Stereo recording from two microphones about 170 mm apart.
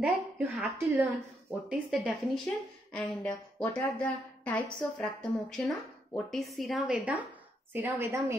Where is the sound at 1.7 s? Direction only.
5° right (ahead or behind).